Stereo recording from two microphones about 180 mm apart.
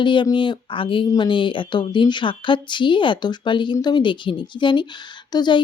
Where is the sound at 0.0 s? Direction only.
25° left (ahead or behind).